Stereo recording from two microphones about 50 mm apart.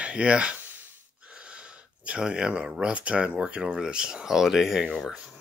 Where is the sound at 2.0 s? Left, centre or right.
Right.